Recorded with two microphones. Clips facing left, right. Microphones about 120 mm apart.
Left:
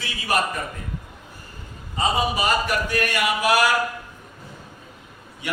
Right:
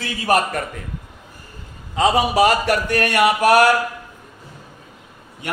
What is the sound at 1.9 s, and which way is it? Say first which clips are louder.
Speech: right 7 dB; 80° right.